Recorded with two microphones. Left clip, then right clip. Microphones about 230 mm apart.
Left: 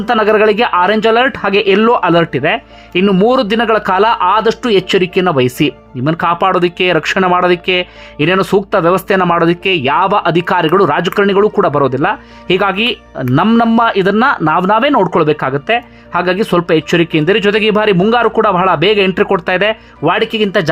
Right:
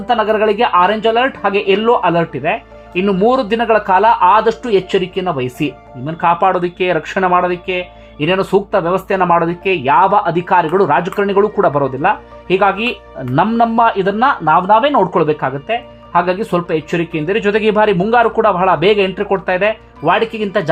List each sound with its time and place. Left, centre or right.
0.0 s speech: left